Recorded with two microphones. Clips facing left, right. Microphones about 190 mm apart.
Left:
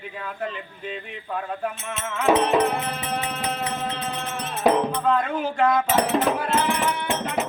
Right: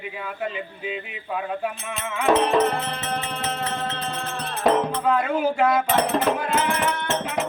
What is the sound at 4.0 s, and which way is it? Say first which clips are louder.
Music: even; 5° left (ahead or behind).